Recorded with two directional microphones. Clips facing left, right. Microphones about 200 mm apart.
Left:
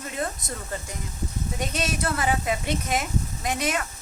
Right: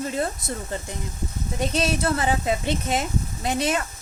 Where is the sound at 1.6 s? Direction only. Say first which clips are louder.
Right 5 dB; 30° right (ahead or behind).